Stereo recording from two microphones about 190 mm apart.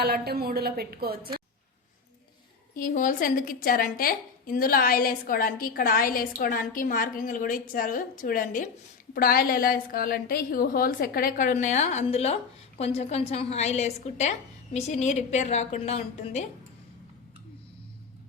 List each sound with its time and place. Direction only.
0.0 s a woman's voice: 55° right (ahead or behind)
2.7 s a woman's voice: 45° left (ahead or behind)